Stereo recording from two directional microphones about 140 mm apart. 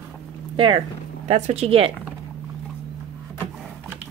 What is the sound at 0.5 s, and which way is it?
Speech, 40° right (ahead or behind).